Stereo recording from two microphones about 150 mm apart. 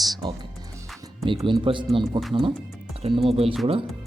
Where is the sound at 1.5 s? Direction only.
35° right (ahead or behind).